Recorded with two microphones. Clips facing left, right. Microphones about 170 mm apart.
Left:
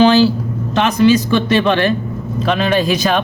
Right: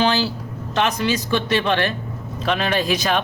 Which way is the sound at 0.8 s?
90° left.